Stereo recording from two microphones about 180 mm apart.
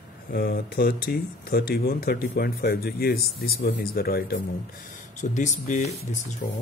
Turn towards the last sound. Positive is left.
turn(degrees=45)  # may be behind; listen again after turning